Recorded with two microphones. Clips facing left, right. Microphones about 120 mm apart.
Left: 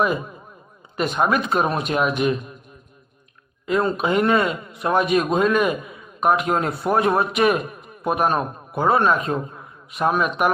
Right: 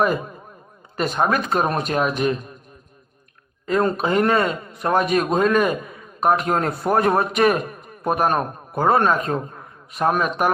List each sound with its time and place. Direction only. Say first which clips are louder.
0.0 s a man's voice: right 1 dB; 45° right (ahead or behind)
3.7 s speech: right 1 dB; 45° right (ahead or behind)